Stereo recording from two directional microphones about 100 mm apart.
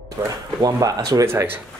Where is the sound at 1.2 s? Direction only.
25° right (ahead or behind).